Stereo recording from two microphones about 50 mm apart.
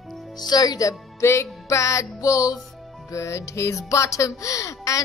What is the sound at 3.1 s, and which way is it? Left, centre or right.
Speech, left.